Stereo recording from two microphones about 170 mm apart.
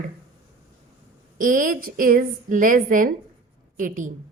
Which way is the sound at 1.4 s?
50° right (ahead or behind).